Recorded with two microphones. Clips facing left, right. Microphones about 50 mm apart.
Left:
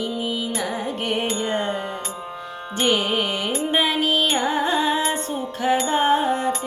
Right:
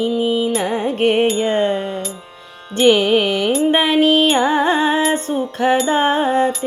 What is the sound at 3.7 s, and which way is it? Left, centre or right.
Music, right.